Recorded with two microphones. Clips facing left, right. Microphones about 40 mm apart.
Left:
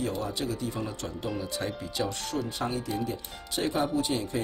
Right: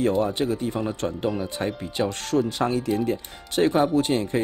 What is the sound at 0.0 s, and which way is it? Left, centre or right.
Speech, right.